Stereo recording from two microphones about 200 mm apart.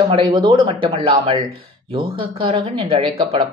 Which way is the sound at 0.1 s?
20° right (ahead or behind).